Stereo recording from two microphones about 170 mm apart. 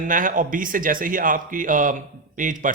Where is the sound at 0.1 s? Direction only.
50° right (ahead or behind).